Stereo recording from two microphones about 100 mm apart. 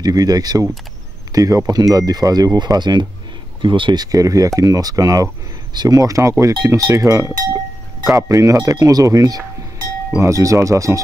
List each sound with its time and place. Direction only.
0.0 s speech: 40° right (ahead or behind)